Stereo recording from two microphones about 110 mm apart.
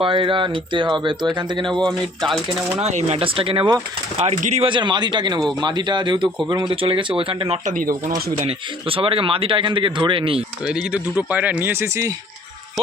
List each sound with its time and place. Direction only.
0.0 s speech: 50° right (ahead or behind)
1.8 s speech: centre (ahead or behind)
2.8 s speech: 80° right; by 3.7 s 55° right (ahead or behind)
4.2 s speech: 80° right
4.7 s speech: 45° right (ahead or behind)
10.7 s speech: 10° right (ahead or behind)